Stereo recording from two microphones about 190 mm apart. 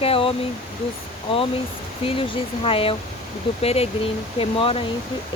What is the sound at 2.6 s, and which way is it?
Speech, 30° left (ahead or behind).